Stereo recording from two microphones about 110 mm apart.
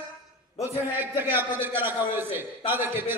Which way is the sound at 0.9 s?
20° right (ahead or behind).